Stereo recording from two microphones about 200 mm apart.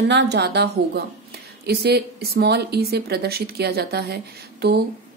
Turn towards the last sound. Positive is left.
turn(degrees=-55)  # may be behind; listen again after turning